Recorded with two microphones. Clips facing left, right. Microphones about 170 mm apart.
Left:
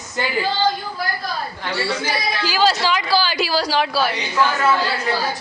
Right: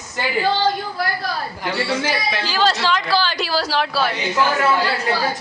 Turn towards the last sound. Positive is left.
turn(degrees=0)  # may be behind; listen again after turning